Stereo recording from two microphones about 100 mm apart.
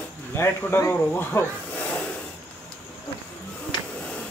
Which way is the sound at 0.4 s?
25° left (ahead or behind).